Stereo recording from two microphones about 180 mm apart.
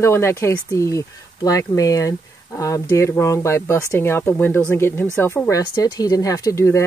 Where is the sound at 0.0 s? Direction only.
15° left (ahead or behind).